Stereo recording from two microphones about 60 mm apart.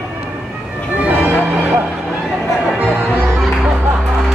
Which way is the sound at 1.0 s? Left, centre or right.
Right.